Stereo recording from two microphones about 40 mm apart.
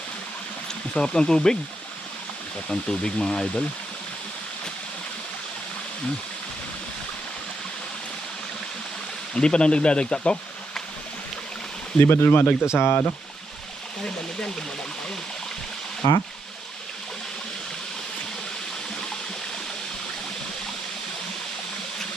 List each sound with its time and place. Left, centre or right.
0.9 s speech: centre
2.6 s speech: left
9.3 s speech: left
11.9 s speech: left
12.3 s speech: left
12.7 s speech: left